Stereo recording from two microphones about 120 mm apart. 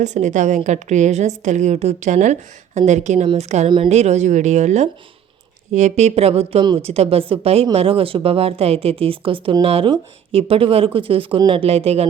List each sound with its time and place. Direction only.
0.0 s a woman's voice: 80° right; by 12.0 s 55° right (ahead or behind)